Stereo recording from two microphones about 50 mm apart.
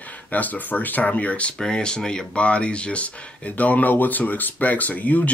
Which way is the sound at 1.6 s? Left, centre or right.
Centre.